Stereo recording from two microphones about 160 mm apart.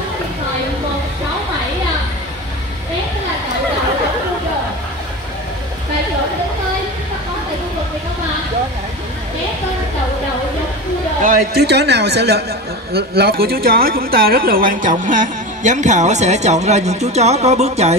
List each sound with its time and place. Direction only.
11.2 s a man's voice: 75° right (ahead or behind); by 12.4 s 90° right
12.9 s a woman's voice: 80° right; by 17.9 s 45° right (ahead or behind)